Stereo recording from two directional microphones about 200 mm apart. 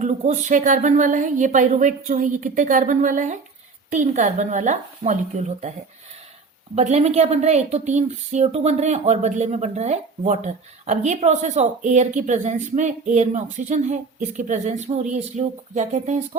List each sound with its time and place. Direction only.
0.0 s speech: 35° right (ahead or behind)
6.7 s speech: 35° right (ahead or behind)